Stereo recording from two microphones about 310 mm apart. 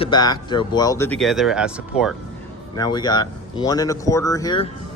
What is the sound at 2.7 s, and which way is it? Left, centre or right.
Speech, centre.